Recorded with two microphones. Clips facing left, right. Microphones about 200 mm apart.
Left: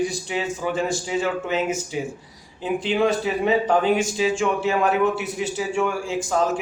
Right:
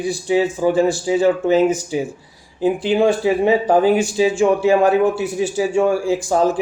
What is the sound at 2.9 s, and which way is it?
Speech, 30° right (ahead or behind).